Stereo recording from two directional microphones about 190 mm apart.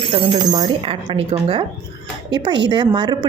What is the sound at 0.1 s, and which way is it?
Speech, 25° right (ahead or behind).